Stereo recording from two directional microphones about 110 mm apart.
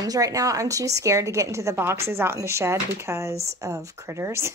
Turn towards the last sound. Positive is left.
turn(degrees=-25)  # may be behind; listen again after turning